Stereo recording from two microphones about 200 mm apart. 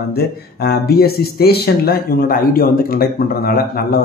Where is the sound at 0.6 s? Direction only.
50° left (ahead or behind).